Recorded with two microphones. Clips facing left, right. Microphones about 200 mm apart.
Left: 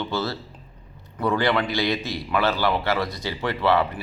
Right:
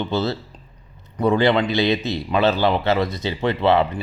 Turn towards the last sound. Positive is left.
turn(degrees=-20)  # may be behind; listen again after turning